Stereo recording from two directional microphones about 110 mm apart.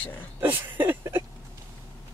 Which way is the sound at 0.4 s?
20° right (ahead or behind).